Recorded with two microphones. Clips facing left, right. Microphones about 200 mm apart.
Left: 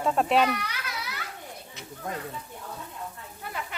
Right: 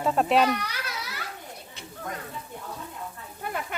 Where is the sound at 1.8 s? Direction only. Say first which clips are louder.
Even; 30° right (ahead or behind).